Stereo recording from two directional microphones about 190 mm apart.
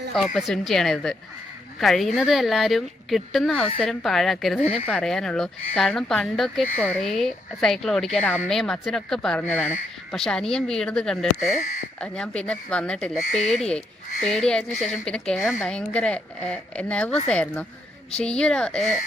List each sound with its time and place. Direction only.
0.3 s speech: centre (ahead or behind)
4.6 s speech: 30° left (ahead or behind)
4.9 s speech: 5° left (ahead or behind)